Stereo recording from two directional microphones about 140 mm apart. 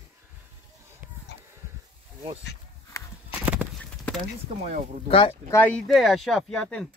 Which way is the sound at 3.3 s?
10° right (ahead or behind).